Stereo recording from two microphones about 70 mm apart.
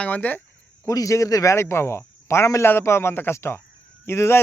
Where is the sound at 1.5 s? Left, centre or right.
Left.